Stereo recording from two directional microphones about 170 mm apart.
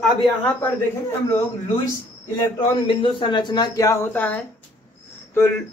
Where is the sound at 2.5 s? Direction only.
25° left (ahead or behind); by 4.4 s 10° left (ahead or behind).